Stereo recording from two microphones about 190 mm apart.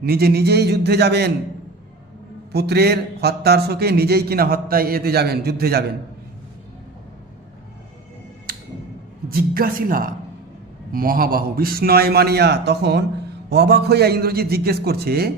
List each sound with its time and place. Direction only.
0.0 s speech: 55° right (ahead or behind)
2.5 s speech: 60° right (ahead or behind)
9.3 s a man's voice: 50° right (ahead or behind)